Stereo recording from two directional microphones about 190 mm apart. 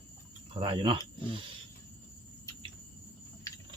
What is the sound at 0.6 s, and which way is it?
Speech, 25° right (ahead or behind).